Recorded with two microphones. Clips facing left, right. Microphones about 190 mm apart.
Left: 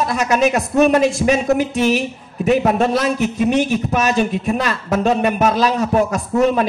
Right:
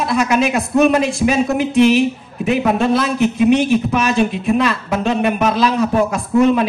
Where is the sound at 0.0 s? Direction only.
40° left (ahead or behind).